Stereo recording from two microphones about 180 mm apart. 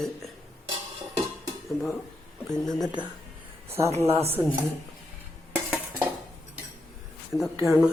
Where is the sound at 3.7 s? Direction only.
15° right (ahead or behind).